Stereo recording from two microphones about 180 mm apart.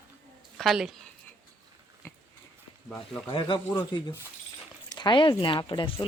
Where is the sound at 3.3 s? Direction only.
25° left (ahead or behind).